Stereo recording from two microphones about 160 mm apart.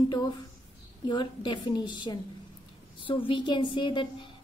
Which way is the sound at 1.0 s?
30° left (ahead or behind).